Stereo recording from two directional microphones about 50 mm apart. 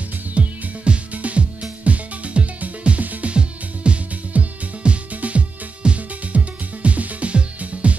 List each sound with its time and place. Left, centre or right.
0.3 s music: right